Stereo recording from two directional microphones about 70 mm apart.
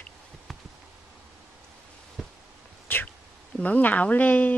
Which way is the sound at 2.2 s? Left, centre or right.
Centre.